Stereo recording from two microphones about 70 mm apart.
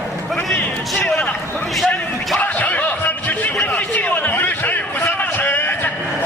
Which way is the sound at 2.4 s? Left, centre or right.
Left.